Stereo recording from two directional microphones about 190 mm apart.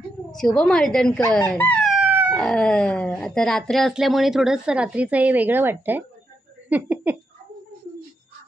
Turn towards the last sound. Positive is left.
turn(degrees=-10)  # may be behind; listen again after turning